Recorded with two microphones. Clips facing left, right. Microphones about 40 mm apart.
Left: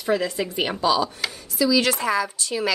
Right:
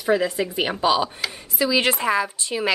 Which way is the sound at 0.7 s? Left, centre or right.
Right.